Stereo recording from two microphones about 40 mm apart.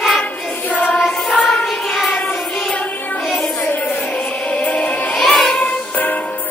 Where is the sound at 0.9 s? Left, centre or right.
Centre.